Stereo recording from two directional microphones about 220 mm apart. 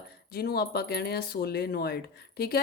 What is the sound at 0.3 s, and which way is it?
Speech, 45° left (ahead or behind).